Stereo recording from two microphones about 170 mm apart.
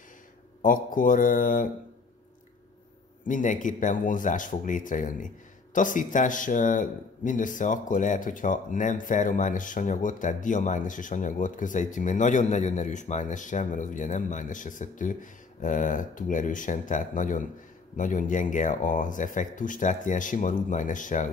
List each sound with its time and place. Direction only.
0.6 s speech: 55° left (ahead or behind)
3.3 s speech: 50° left (ahead or behind)